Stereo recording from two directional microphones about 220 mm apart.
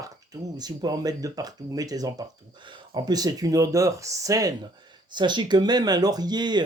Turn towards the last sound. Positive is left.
turn(degrees=-20)  # may be behind; listen again after turning